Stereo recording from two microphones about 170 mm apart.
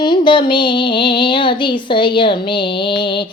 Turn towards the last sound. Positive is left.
turn(degrees=30)  # may be behind; listen again after turning